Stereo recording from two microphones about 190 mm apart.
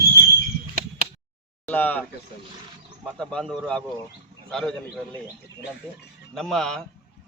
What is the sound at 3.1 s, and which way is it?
Speech, 5° left (ahead or behind).